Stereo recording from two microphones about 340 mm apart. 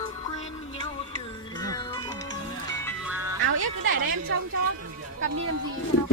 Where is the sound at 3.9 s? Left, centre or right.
Right.